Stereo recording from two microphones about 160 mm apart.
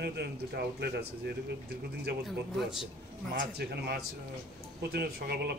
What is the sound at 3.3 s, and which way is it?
Speech, 85° right.